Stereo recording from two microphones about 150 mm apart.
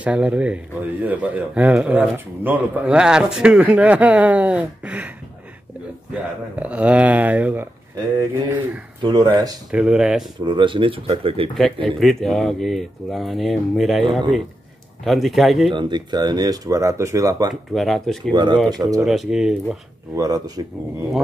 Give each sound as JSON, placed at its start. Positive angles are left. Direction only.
{"t": 0.0, "sound": "a man's voice", "side_deg": -10}
{"t": 6.5, "sound": "a man's voice", "side_deg": -10}
{"t": 9.0, "sound": "speech", "side_deg": -30}
{"t": 9.7, "sound": "speech", "side_deg": -5}
{"t": 10.4, "sound": "speech", "side_deg": -30}
{"t": 11.5, "sound": "speech", "side_deg": 5}
{"t": 15.0, "sound": "speech", "side_deg": 0}
{"t": 15.7, "sound": "speech", "side_deg": -30}
{"t": 17.7, "sound": "speech", "side_deg": 0}
{"t": 18.3, "sound": "speech", "side_deg": -30}
{"t": 19.0, "sound": "speech", "side_deg": 0}
{"t": 20.2, "sound": "speech", "side_deg": -25}